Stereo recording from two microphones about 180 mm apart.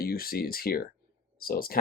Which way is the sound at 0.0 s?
55° left (ahead or behind).